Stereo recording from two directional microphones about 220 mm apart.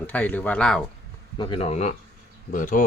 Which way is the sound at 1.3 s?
20° left (ahead or behind).